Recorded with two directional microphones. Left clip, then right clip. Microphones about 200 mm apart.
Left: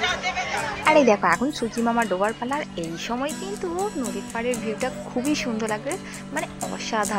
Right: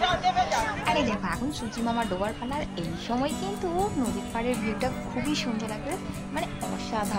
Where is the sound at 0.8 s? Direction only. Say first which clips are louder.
Left 10 dB; 20° left (ahead or behind).